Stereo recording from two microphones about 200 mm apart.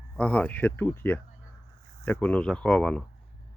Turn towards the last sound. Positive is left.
turn(degrees=5)  # may be behind; listen again after turning